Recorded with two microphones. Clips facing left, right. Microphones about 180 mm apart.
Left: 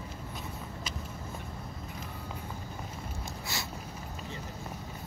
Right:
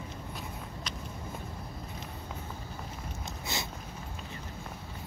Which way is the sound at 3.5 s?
20° right (ahead or behind).